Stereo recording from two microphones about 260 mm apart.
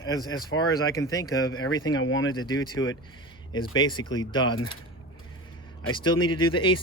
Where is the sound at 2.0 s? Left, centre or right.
Left.